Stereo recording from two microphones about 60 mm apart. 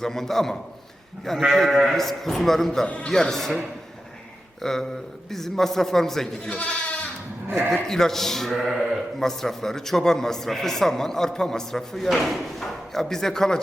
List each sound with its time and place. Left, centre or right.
0.0 s a man's voice: centre
2.8 s a man's voice: centre
3.1 s a man's voice: centre
4.6 s a man's voice: centre
7.4 s speech: right
7.7 s a man's voice: centre